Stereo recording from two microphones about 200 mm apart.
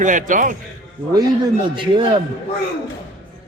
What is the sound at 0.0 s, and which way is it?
Speech, 40° right (ahead or behind).